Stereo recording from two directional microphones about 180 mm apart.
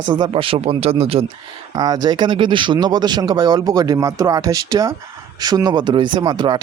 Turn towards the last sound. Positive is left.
turn(degrees=-25)  # may be behind; listen again after turning